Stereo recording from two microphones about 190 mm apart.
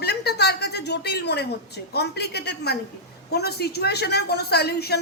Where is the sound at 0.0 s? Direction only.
60° left (ahead or behind).